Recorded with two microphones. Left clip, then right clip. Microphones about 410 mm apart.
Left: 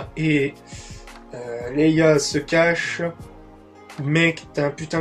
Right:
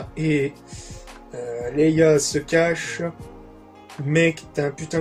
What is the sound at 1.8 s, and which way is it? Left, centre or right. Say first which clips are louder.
Speech: even; left.